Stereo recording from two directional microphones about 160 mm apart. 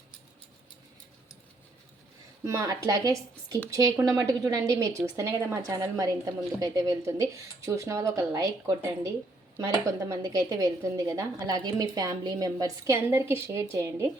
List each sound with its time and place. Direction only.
2.4 s a woman's voice: 20° right (ahead or behind)